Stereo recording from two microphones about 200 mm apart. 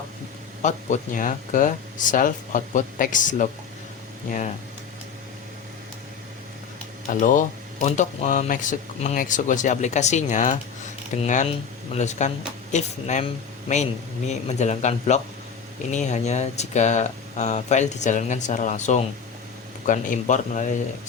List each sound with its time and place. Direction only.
0.6 s speech: 40° left (ahead or behind)
7.1 s speech: 40° left (ahead or behind)